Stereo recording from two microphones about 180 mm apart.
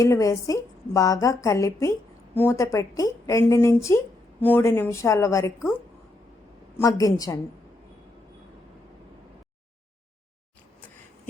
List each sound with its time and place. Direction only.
0.0 s a woman's voice: 15° left (ahead or behind)
7.0 s a woman's voice: 20° left (ahead or behind)